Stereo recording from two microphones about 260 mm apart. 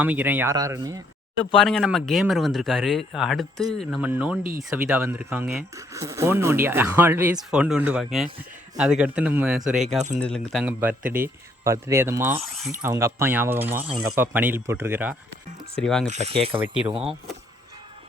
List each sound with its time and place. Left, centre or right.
0.0 s speech: centre
1.5 s speech: centre
12.9 s speech: centre
15.7 s speech: centre
16.0 s speech: right